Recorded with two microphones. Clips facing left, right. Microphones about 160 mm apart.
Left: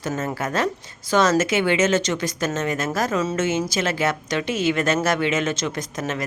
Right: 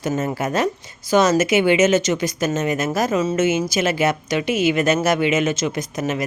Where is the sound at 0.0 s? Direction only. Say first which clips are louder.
Right 4 dB; 10° right (ahead or behind).